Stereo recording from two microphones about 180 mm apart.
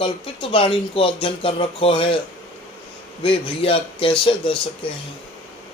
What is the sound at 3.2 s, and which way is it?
Speech, 30° left (ahead or behind).